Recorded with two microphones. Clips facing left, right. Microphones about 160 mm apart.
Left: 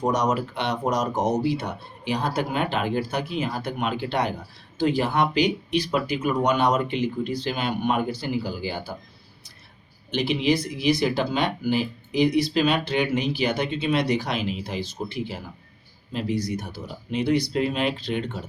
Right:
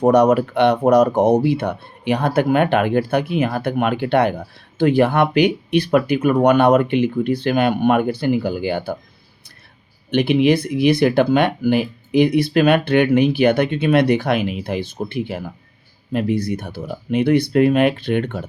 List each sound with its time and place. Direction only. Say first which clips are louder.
0.0 s speech: right 10 dB; 60° right (ahead or behind)
10.1 s speech: right 8 dB; 60° right (ahead or behind)